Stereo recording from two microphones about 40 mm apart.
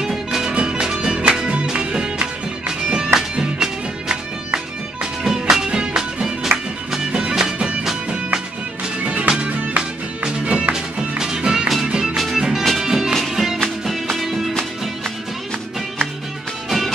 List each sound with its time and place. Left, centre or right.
0.0 s music: centre
0.5 s music: right
5.2 s music: centre
7.3 s music: centre
9.0 s music: right
10.7 s music: centre
16.6 s music: centre